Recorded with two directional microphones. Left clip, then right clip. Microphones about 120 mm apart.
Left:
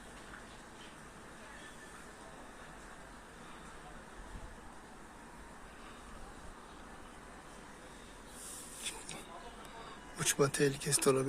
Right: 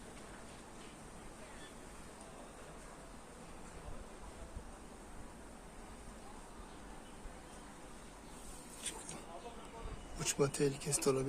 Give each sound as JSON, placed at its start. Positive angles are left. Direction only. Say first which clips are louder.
{"t": 8.8, "sound": "vehicle", "louder": "left 3 dB", "side_deg": -25}
{"t": 10.2, "sound": "speech", "louder": "left 4 dB", "side_deg": 15}